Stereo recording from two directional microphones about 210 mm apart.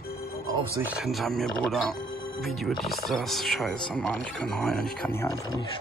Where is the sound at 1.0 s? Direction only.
Centre (ahead or behind).